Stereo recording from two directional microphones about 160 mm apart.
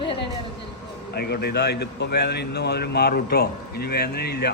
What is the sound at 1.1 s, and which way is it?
A man's voice, 90° left.